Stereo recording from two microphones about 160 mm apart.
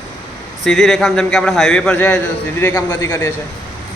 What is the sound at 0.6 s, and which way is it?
A man's voice, centre (ahead or behind).